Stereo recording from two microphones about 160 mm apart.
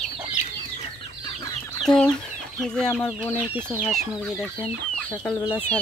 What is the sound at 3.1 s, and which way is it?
Speech, 10° right (ahead or behind).